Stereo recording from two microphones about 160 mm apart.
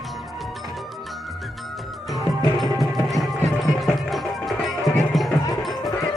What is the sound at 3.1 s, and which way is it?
Music, centre (ahead or behind).